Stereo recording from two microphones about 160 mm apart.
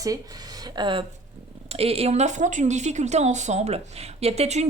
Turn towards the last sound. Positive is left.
turn(degrees=-45)  # may be behind; listen again after turning